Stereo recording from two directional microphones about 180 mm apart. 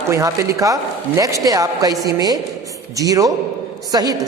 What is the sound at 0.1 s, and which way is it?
A man's voice, 15° right (ahead or behind).